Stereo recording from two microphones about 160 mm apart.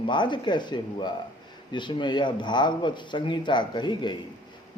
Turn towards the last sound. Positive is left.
turn(degrees=30)  # may be behind; listen again after turning